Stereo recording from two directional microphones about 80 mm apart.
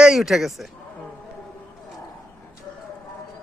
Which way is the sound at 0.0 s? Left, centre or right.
Centre.